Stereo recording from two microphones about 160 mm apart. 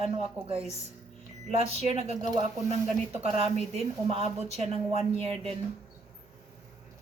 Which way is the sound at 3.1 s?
40° right (ahead or behind).